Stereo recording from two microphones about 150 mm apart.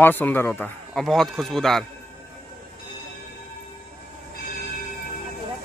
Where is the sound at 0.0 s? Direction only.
15° left (ahead or behind).